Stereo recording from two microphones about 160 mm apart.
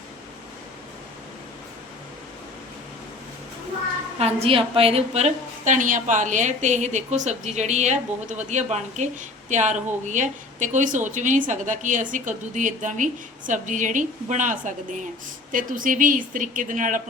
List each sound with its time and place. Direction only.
4.2 s speech: 40° right (ahead or behind); by 17.0 s 55° right (ahead or behind)